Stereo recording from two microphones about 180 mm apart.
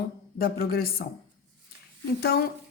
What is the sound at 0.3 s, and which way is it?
Speech, 55° left (ahead or behind).